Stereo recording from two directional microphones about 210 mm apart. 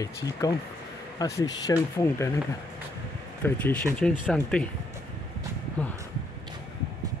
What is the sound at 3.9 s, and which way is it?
Speech, 5° left (ahead or behind).